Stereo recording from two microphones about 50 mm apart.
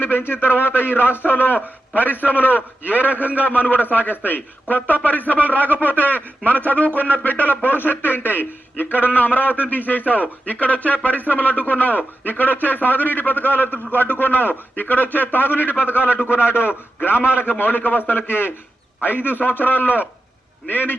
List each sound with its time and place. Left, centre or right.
0.0 s a man's voice: left
5.6 s speech: right
5.9 s a man's voice: left
16.3 s a man's voice: right
16.6 s a man's voice: left